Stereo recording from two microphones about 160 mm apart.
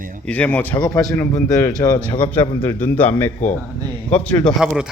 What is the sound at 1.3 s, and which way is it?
Speech, 20° left (ahead or behind).